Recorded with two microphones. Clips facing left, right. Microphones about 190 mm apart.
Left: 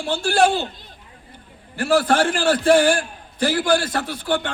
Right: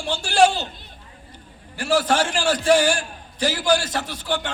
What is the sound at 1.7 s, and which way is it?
A man's voice, 55° left (ahead or behind).